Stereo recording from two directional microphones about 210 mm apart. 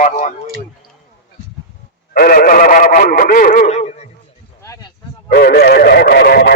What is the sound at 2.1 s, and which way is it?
Speech, 45° left (ahead or behind).